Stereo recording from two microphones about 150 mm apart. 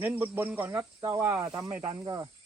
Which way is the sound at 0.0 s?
15° right (ahead or behind).